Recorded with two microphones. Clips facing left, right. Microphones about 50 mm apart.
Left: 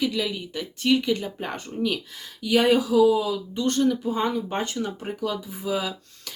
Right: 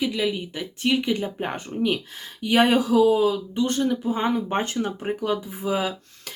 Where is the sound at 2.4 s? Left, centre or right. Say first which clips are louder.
Right 1 dB; right.